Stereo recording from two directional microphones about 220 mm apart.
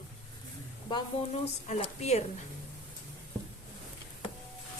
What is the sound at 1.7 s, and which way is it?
Speech, 30° left (ahead or behind).